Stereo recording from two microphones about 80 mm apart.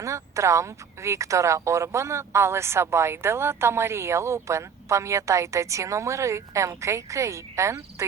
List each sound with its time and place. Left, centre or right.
0.0 s speech: right